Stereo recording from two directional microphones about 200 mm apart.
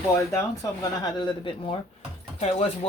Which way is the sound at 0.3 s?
15° left (ahead or behind).